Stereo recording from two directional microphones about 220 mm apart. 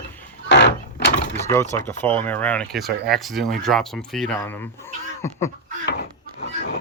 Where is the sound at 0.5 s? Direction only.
50° left (ahead or behind).